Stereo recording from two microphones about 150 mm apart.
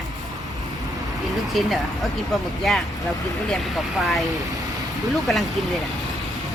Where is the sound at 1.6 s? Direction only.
Centre (ahead or behind).